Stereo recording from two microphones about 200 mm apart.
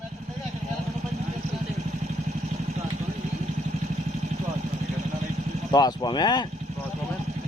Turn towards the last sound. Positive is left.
turn(degrees=20)  # may be behind; listen again after turning